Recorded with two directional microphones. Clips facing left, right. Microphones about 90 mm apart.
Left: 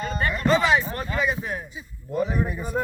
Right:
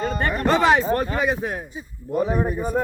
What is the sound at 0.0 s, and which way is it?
A man's voice, 45° right (ahead or behind).